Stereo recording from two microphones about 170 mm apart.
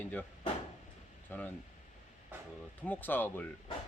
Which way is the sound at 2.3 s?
10° right (ahead or behind).